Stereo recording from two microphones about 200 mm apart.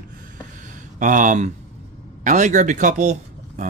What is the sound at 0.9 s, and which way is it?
Speech, 40° right (ahead or behind).